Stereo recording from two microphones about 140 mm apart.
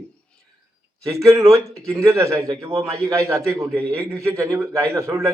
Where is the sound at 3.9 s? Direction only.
20° right (ahead or behind).